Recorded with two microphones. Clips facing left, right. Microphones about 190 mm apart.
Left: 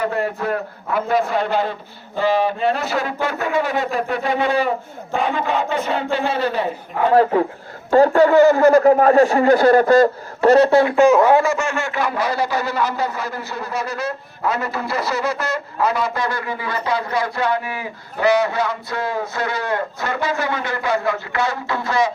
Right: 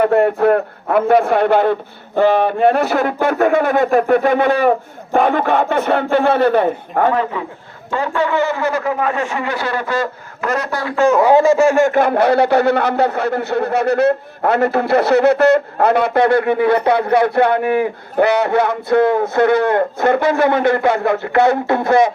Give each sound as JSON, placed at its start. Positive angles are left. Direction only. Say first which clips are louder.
{"t": 0.0, "sound": "speech", "louder": "right 9 dB", "side_deg": -55}
{"t": 7.1, "sound": "speech", "louder": "left 4 dB", "side_deg": 40}
{"t": 11.3, "sound": "speech", "louder": "right 8 dB", "side_deg": -30}